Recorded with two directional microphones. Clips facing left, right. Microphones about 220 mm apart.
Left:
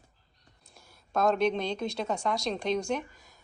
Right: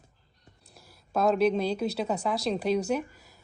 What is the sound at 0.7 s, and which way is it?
A woman's voice, 5° right (ahead or behind).